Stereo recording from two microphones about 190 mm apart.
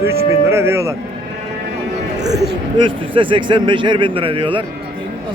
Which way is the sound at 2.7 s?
25° right (ahead or behind).